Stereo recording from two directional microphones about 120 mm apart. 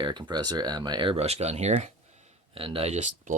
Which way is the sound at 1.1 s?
60° right (ahead or behind).